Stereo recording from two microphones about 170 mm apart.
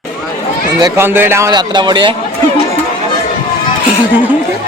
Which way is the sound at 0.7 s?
25° right (ahead or behind).